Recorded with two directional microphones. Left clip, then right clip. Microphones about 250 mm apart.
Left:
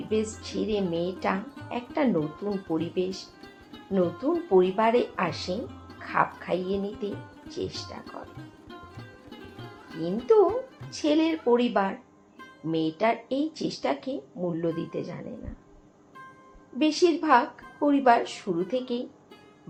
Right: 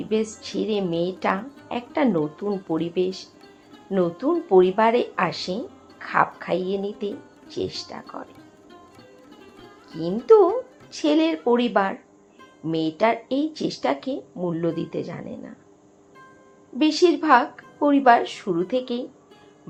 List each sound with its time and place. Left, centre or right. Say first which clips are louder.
0.1 s a woman's voice: right 3 dB; right
8.4 s music: left 2 dB; centre
10.0 s a woman's voice: right 5 dB; right
16.7 s a woman's voice: right 4 dB; right